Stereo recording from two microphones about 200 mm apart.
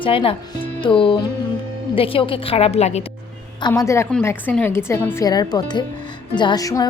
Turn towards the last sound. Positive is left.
turn(degrees=15)  # may be behind; listen again after turning